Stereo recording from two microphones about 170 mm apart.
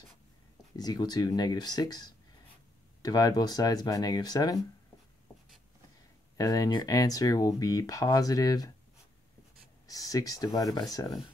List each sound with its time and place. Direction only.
0.7 s speech: 25° left (ahead or behind)
6.3 s speech: 20° left (ahead or behind)
9.8 s speech: 20° left (ahead or behind)